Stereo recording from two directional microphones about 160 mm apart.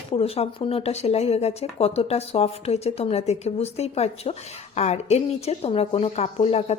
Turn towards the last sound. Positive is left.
turn(degrees=40)  # may be behind; listen again after turning